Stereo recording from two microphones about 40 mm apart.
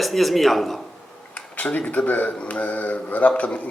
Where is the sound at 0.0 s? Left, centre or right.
Centre.